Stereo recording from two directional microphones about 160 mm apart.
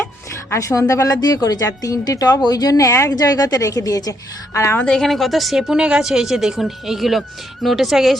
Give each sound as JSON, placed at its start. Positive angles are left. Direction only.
{"t": 0.5, "sound": "a woman's voice", "side_deg": 20}